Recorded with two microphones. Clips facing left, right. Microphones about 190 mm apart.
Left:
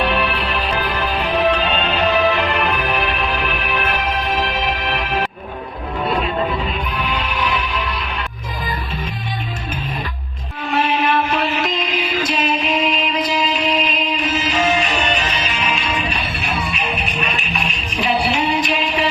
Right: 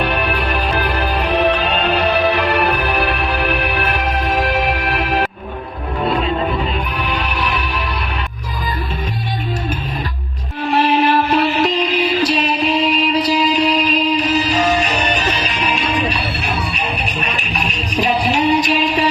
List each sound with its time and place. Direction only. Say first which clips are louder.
0.0 s music: right 1 dB; 45° right (ahead or behind)
1.3 s music: right 1 dB; 70° right (ahead or behind)
2.6 s music: right 3 dB; 40° right (ahead or behind)
10.7 s music: right 4 dB; 35° right (ahead or behind)